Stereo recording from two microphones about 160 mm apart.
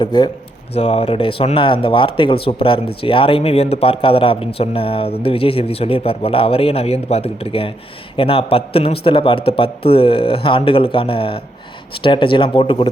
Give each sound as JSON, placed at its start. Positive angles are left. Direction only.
{"t": 0.0, "sound": "speech", "side_deg": 25}
{"t": 0.7, "sound": "speech", "side_deg": 40}